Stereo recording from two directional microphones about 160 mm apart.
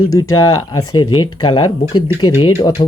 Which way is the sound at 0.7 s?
25° left (ahead or behind).